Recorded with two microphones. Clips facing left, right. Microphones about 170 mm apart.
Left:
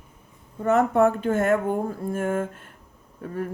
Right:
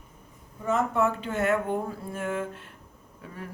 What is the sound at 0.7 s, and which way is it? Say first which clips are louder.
Speech: left 6 dB; 60° left (ahead or behind).